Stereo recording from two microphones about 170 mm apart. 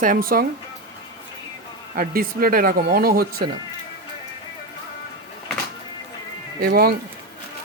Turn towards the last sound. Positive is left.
turn(degrees=-65)  # may be behind; listen again after turning